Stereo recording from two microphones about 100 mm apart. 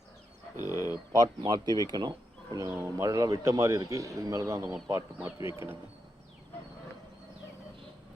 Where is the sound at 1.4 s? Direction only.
45° right (ahead or behind); by 5.7 s 25° right (ahead or behind).